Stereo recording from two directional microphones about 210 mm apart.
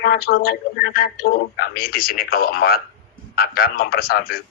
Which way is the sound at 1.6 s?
45° left (ahead or behind).